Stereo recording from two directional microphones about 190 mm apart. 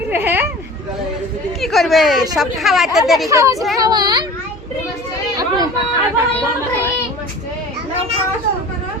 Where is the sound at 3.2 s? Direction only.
15° right (ahead or behind).